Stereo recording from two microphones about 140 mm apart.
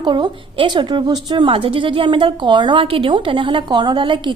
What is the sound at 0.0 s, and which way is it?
A woman's voice, 35° right (ahead or behind).